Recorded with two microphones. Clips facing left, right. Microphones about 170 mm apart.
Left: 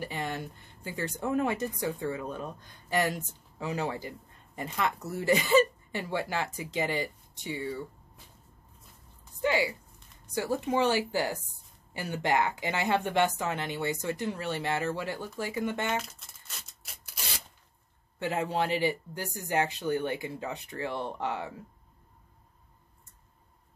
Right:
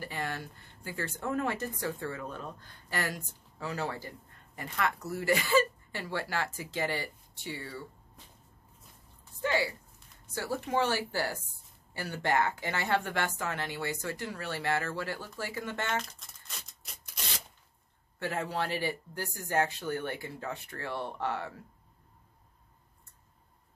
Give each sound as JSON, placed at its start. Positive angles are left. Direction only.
{"t": 0.0, "sound": "speech", "side_deg": 20}
{"t": 9.4, "sound": "speech", "side_deg": 15}
{"t": 16.0, "sound": "tearing", "side_deg": 5}
{"t": 18.2, "sound": "speech", "side_deg": 20}